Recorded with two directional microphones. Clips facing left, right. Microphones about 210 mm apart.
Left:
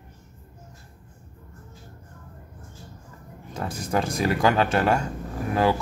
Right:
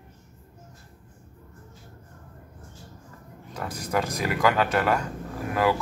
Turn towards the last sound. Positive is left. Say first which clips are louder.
# left 2 dB
turn(degrees=30)  # may be behind; listen again after turning